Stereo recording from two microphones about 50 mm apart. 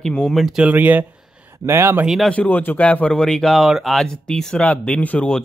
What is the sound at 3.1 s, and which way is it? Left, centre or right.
Speech, centre.